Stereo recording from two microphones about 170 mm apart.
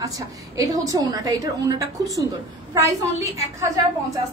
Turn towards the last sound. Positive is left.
turn(degrees=-20)  # may be behind; listen again after turning